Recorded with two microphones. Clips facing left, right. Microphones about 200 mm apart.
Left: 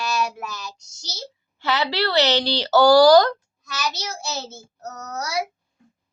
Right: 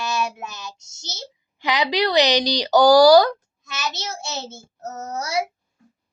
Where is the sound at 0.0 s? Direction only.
20° right (ahead or behind).